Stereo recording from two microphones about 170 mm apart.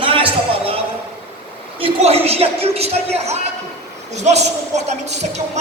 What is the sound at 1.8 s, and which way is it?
Speech, 35° right (ahead or behind).